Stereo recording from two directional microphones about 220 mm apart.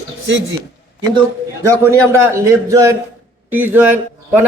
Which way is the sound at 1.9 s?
10° right (ahead or behind).